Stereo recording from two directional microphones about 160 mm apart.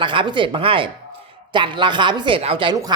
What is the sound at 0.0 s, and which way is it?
A woman's voice, 30° right (ahead or behind).